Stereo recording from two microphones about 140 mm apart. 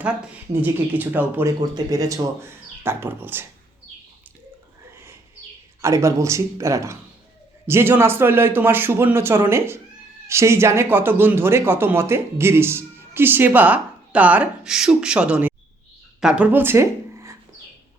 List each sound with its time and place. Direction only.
0.6 s speech: 15° right (ahead or behind)
1.7 s speech: 25° right (ahead or behind)
5.8 s speech: 20° right (ahead or behind)